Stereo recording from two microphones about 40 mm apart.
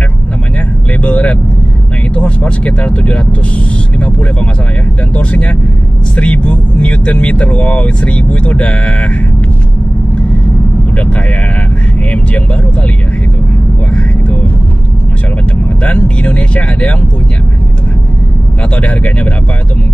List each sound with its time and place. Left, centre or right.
1.0 s speech: left
11.0 s speech: left
15.8 s speech: left
18.8 s speech: left